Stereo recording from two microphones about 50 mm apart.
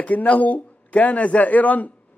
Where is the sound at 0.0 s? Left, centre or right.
Left.